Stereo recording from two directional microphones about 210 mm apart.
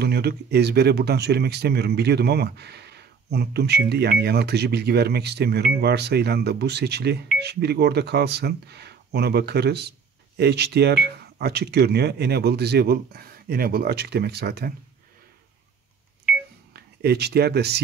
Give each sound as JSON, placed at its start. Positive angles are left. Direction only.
{"t": 0.0, "sound": "speech", "side_deg": -50}
{"t": 17.0, "sound": "speech", "side_deg": -50}